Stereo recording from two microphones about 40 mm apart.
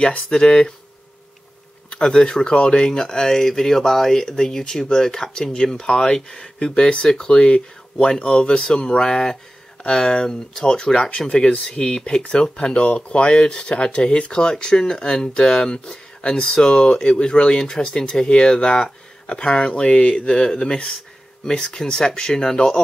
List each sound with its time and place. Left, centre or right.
0.0 s speech: left
1.9 s speech: left
21.5 s speech: centre